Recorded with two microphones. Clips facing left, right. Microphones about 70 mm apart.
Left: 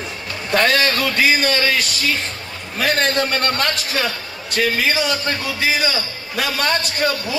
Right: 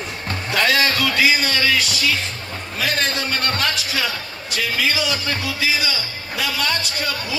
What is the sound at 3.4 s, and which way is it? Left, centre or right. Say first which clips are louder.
A man's voice: left 2 dB; left.